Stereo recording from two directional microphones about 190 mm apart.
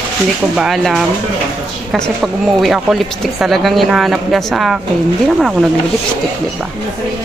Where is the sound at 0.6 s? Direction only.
Centre (ahead or behind).